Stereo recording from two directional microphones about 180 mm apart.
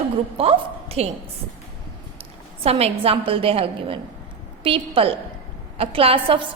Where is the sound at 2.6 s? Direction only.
35° right (ahead or behind).